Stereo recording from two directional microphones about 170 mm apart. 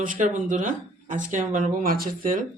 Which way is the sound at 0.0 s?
50° right (ahead or behind).